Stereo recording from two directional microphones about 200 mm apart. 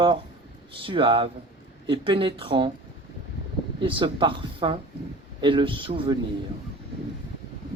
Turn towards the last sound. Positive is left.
turn(degrees=-25)  # may be behind; listen again after turning